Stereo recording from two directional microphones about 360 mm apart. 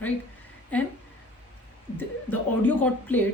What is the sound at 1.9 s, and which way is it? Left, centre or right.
Speech, centre.